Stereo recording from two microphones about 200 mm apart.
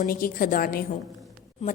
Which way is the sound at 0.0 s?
45° left (ahead or behind).